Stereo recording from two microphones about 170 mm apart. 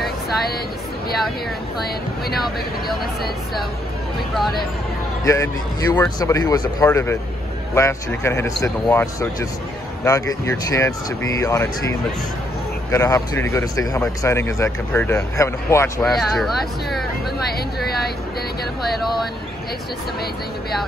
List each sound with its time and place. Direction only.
5.2 s speech: 20° left (ahead or behind)
12.9 s speech: 15° left (ahead or behind)
16.0 s speech: centre (ahead or behind)